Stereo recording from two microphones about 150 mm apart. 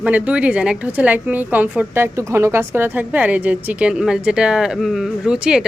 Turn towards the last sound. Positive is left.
turn(degrees=-5)  # may be behind; listen again after turning